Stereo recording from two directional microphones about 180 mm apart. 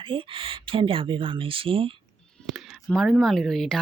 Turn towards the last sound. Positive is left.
turn(degrees=0)  # may be behind; listen again after turning